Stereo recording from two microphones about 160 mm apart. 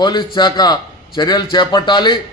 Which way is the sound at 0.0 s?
25° left (ahead or behind).